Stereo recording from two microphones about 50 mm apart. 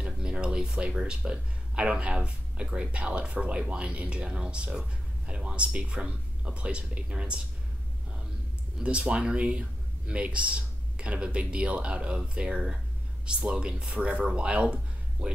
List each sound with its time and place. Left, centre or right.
0.0 s speech: right
8.8 s speech: right